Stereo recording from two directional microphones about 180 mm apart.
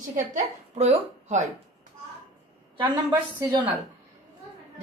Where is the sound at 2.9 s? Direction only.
20° right (ahead or behind).